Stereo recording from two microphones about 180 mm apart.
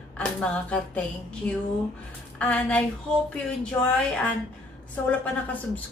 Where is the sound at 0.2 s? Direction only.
5° left (ahead or behind).